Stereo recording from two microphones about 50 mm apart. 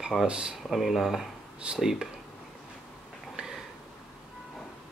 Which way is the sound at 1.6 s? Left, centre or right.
Centre.